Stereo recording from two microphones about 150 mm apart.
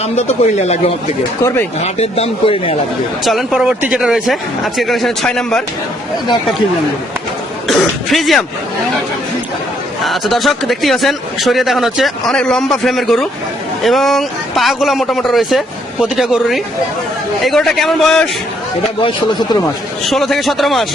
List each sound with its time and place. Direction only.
0.0 s speech: 45° left (ahead or behind)
1.4 s speech: 20° left (ahead or behind)
1.8 s speech: 45° left (ahead or behind)
3.2 s speech: centre (ahead or behind)
7.7 s speech: centre (ahead or behind)
10.0 s speech: centre (ahead or behind)
20.1 s speech: centre (ahead or behind)